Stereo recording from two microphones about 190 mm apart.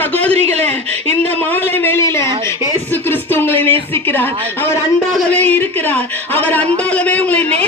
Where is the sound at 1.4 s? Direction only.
10° left (ahead or behind).